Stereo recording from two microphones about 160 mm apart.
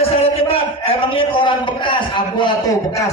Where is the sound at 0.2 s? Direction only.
35° left (ahead or behind).